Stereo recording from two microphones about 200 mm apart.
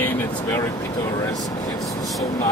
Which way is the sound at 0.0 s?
15° left (ahead or behind).